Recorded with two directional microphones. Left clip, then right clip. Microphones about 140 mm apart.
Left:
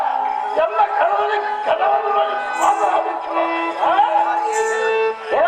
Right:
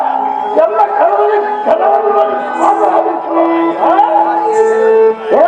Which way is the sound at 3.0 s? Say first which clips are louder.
Right 8 dB; 15° right (ahead or behind).